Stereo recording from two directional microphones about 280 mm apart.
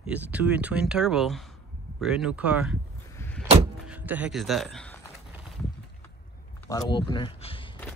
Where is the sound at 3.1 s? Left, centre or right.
Centre.